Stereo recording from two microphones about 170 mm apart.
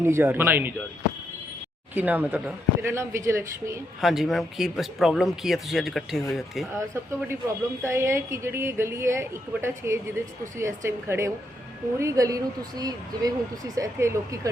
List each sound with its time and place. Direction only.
0.0 s a woman's voice: 15° right (ahead or behind)
1.9 s a woman's voice: 10° right (ahead or behind)
4.0 s speech: centre (ahead or behind)
6.7 s a woman's voice: 15° right (ahead or behind)